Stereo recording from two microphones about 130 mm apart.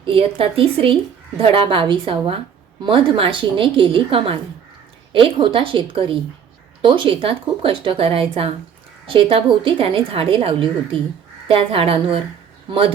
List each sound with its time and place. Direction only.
0.0 s a woman's voice: 45° right (ahead or behind)